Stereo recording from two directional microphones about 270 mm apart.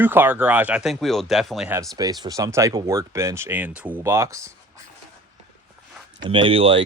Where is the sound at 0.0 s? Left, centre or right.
Centre.